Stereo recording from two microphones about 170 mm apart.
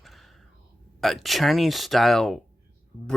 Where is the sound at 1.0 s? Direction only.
Centre (ahead or behind).